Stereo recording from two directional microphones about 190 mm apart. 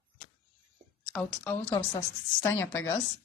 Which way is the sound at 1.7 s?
20° left (ahead or behind).